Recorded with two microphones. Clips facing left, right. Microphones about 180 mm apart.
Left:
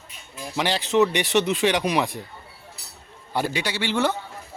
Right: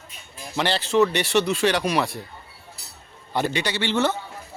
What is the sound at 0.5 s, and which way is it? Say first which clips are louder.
Speech: even; 10° left (ahead or behind).